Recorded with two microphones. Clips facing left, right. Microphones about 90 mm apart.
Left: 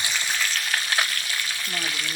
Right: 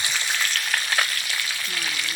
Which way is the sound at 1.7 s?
25° left (ahead or behind).